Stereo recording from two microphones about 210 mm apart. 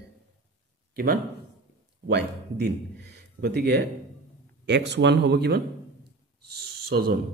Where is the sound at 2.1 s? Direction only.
55° right (ahead or behind).